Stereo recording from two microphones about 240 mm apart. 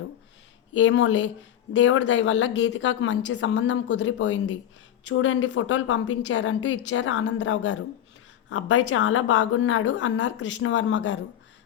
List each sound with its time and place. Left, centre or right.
0.7 s a woman's voice: left